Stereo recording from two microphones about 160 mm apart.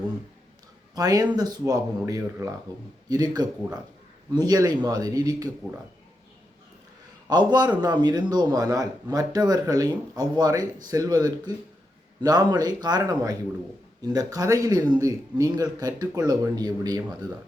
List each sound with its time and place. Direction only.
0.9 s speech: 25° right (ahead or behind)
7.3 s speech: 25° right (ahead or behind)